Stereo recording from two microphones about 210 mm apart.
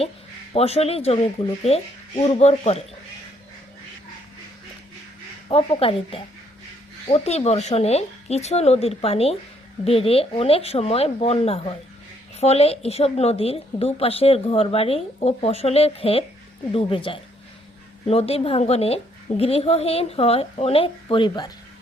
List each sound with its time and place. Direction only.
0.5 s a woman's voice: 30° left (ahead or behind)
5.5 s a woman's voice: 25° left (ahead or behind)